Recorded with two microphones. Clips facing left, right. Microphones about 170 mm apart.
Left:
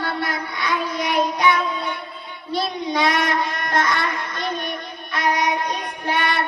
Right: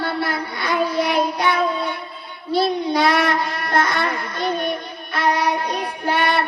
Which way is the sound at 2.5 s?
30° right (ahead or behind).